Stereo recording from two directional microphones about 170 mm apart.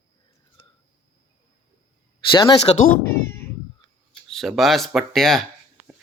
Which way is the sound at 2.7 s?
35° left (ahead or behind).